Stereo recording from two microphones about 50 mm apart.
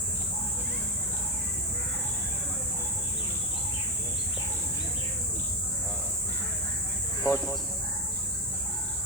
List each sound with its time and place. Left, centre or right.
7.3 s speech: left